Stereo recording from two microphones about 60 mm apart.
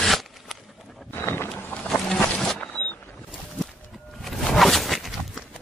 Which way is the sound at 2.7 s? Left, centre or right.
Left.